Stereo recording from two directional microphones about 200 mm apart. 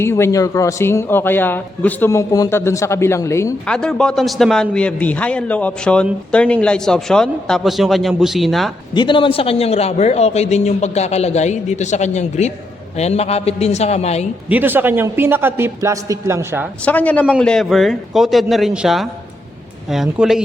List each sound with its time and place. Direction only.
0.0 s a man's voice: 10° left (ahead or behind)
9.0 s a man's voice: 25° left (ahead or behind)
14.5 s a man's voice: 10° right (ahead or behind)
16.8 s a man's voice: 5° left (ahead or behind)